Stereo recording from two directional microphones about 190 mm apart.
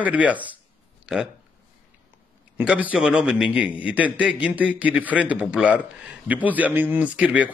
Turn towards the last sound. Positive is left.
turn(degrees=-10)  # may be behind; listen again after turning